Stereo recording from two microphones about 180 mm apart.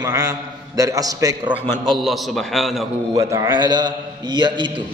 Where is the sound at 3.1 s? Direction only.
20° right (ahead or behind).